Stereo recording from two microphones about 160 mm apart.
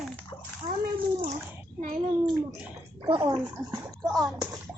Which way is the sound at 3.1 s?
25° right (ahead or behind).